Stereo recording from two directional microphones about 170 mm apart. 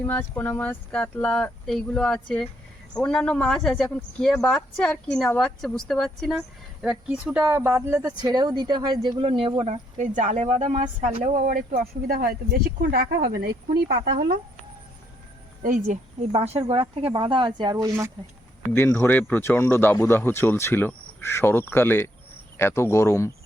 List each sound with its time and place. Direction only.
0.0 s speech: 10° left (ahead or behind); by 14.1 s 65° right (ahead or behind)
15.6 s speech: 45° right (ahead or behind)
17.1 s speech: 25° right (ahead or behind)
18.7 s speech: 10° left (ahead or behind)